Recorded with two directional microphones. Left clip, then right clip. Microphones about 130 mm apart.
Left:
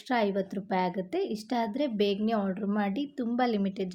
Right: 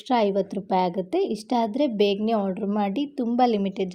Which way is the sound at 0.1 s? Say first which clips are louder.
Right 6 dB; 20° right (ahead or behind).